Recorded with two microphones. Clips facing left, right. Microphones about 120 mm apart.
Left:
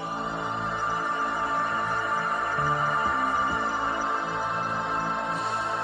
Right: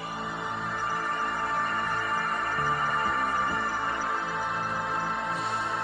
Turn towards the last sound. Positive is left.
turn(degrees=0)  # may be behind; listen again after turning